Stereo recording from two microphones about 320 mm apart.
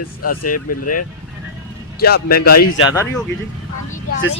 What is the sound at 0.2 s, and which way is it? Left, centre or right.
Speech, left.